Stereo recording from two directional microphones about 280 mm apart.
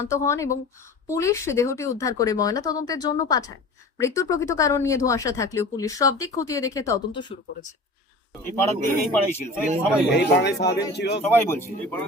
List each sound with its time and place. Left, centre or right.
0.1 s speech: centre
8.4 s speech: centre
10.2 s a man's voice: left
11.3 s speech: centre